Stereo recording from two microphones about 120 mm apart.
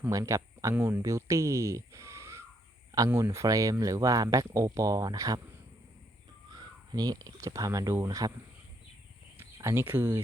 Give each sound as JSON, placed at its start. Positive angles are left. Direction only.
{"t": 0.1, "sound": "speech", "side_deg": -25}
{"t": 6.5, "sound": "speech", "side_deg": -35}
{"t": 9.4, "sound": "speech", "side_deg": -20}